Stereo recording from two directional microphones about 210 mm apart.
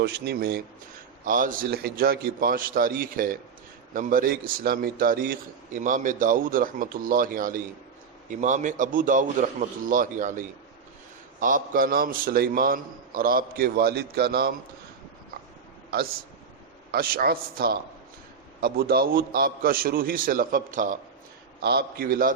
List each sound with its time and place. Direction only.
0.0 s a man's voice: 50° right (ahead or behind)
16.9 s a man's voice: 45° right (ahead or behind)
21.6 s a man's voice: 50° right (ahead or behind)